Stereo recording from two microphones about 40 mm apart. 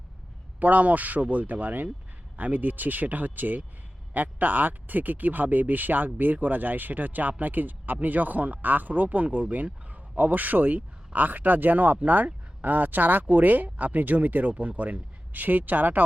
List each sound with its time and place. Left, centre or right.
0.6 s speech: right